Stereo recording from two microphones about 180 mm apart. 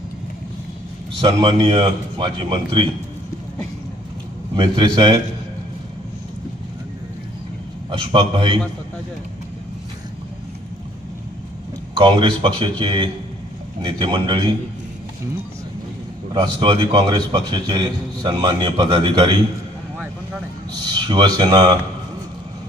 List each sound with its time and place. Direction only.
1.2 s a man's voice: 25° right (ahead or behind)
4.5 s a man's voice: 25° right (ahead or behind)
7.9 s a man's voice: 30° right (ahead or behind)
11.9 s a man's voice: 25° right (ahead or behind)
16.3 s a man's voice: 25° right (ahead or behind)
20.8 s a man's voice: 25° right (ahead or behind)